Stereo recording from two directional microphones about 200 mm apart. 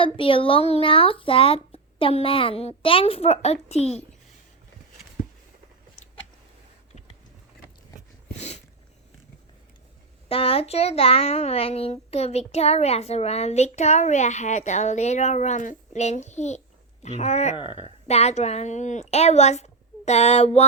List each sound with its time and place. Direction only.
0.0 s speech: 25° left (ahead or behind)
8.4 s a sound: 35° left (ahead or behind)
10.2 s a child's voice: 30° left (ahead or behind)